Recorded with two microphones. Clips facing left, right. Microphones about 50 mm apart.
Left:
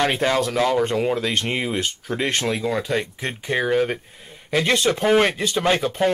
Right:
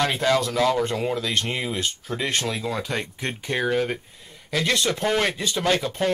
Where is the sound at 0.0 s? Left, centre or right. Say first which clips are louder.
Left 2 dB; left.